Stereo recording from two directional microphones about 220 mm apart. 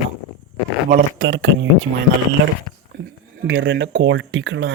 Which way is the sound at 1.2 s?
60° right (ahead or behind).